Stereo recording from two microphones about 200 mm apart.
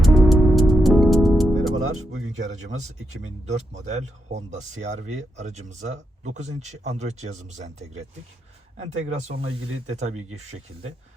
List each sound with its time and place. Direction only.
0.0 s music: centre (ahead or behind)
2.1 s speech: 35° right (ahead or behind)